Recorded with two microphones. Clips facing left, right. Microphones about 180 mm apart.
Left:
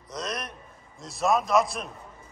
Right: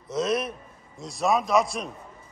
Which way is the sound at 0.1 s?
5° right (ahead or behind).